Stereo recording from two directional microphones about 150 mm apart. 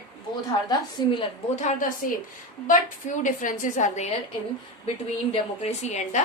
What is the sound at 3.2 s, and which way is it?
Speech, 60° left (ahead or behind).